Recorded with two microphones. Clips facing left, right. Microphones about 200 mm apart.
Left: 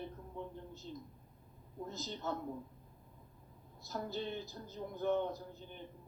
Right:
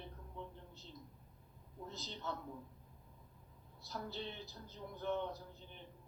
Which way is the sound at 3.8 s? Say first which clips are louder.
Left 5 dB; 45° left (ahead or behind).